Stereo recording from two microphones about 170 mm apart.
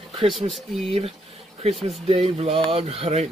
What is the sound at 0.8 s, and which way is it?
Speech, 35° right (ahead or behind).